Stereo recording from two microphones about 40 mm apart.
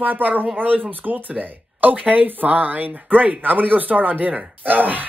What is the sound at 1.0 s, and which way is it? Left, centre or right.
Speech, right.